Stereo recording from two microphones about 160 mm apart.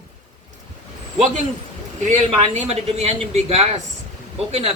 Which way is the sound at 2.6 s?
40° right (ahead or behind).